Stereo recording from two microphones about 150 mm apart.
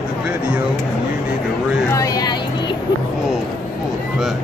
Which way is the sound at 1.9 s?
25° left (ahead or behind).